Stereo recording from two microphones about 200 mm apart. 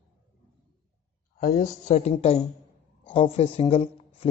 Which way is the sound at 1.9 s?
35° left (ahead or behind).